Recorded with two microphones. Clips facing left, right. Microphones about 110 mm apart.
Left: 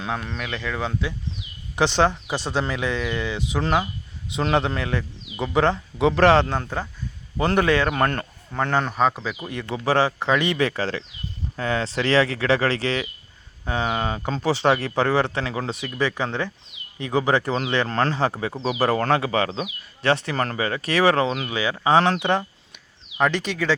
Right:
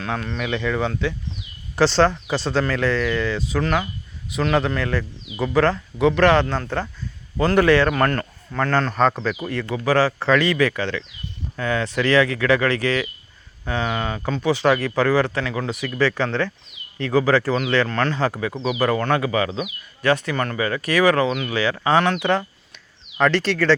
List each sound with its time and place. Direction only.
0.1 s speech: 5° left (ahead or behind)
1.7 s speech: 15° left (ahead or behind)
9.3 s speech: 20° left (ahead or behind)
21.5 s speech: 20° left (ahead or behind)